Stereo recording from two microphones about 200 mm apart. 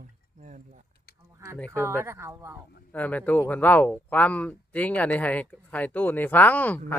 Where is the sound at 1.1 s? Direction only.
55° left (ahead or behind).